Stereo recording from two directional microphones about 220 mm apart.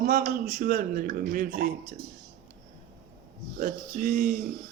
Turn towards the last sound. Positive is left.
turn(degrees=-40)  # may be behind; listen again after turning